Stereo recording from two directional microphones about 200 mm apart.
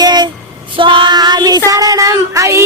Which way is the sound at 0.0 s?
20° right (ahead or behind).